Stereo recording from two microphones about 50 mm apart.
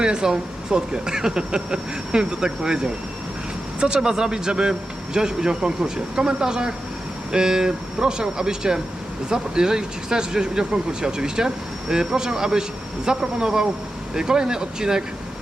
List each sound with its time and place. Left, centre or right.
0.0 s speech: centre